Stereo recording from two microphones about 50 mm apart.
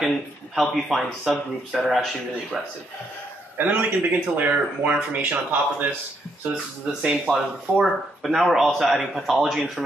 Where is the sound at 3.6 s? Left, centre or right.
Right.